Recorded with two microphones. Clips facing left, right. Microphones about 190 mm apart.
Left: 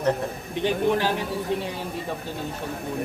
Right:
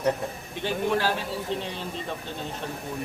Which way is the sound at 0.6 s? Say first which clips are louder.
Left 3 dB; 15° left (ahead or behind).